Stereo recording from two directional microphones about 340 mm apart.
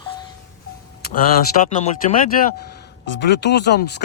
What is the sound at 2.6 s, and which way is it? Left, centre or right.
Speech, left.